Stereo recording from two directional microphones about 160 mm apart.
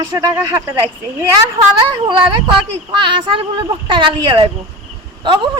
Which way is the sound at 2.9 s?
30° right (ahead or behind).